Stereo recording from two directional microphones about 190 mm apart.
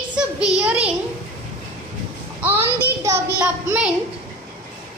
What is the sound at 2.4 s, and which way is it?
A child's voice, 10° right (ahead or behind).